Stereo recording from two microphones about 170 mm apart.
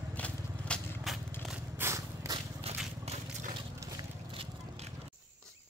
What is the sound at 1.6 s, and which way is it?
Biting, 15° right (ahead or behind).